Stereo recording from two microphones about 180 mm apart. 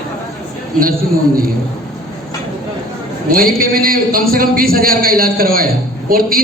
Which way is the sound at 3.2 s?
55° right (ahead or behind).